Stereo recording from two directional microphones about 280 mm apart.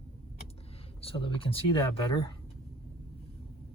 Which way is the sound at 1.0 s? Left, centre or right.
Centre.